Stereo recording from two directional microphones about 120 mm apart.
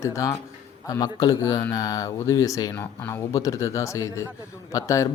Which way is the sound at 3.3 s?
30° left (ahead or behind).